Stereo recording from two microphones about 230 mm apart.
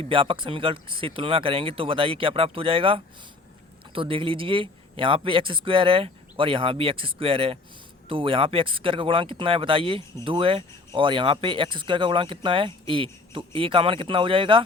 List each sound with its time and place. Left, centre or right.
0.0 s speech: right